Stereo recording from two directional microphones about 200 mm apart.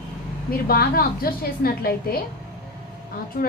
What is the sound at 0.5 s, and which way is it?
A woman's voice, 50° left (ahead or behind).